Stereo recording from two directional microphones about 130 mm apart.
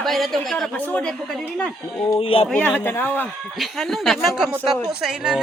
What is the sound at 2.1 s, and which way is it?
Speech, 45° left (ahead or behind).